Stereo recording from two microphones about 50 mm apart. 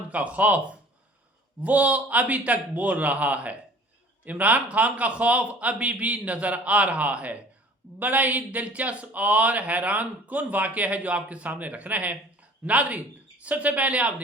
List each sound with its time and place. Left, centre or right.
0.1 s speech: right
1.6 s speech: right